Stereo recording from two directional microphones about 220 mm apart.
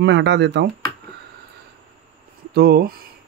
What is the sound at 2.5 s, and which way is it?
Speech, 45° right (ahead or behind).